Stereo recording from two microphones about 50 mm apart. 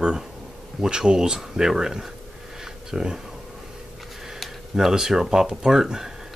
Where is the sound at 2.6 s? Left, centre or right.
Centre.